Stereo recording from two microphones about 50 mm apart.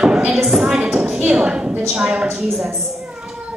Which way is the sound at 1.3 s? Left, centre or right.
Centre.